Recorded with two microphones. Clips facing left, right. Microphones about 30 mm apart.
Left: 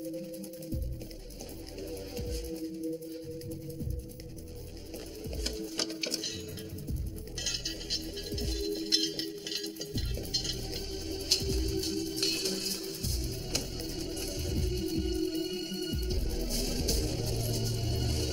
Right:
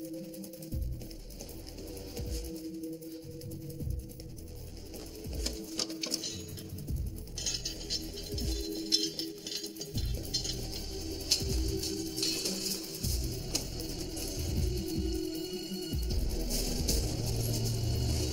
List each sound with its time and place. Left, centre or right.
5.4 s sewing machine: left
7.4 s music: centre